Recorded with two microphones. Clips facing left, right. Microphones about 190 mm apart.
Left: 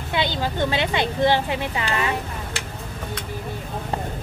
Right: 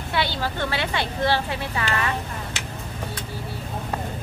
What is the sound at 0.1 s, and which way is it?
A woman's voice, 20° left (ahead or behind).